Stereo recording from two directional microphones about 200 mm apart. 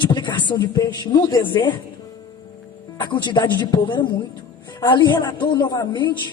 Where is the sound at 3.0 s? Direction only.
25° left (ahead or behind).